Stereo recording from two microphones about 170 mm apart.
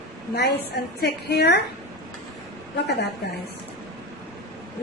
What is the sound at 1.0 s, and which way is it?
Speech, 75° left (ahead or behind).